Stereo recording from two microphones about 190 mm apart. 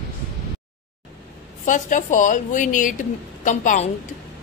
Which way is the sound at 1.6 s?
40° left (ahead or behind).